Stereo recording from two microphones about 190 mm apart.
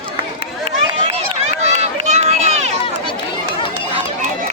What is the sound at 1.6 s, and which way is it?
Run, 35° right (ahead or behind).